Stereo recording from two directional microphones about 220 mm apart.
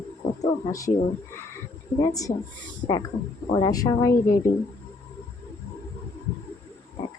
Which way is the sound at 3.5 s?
15° left (ahead or behind).